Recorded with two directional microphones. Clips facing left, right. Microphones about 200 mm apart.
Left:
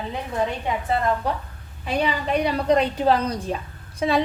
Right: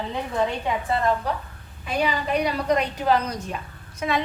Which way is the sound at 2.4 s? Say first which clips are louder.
Left 5 dB; 30° left (ahead or behind).